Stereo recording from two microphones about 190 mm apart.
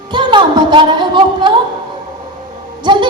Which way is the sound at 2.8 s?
25° right (ahead or behind).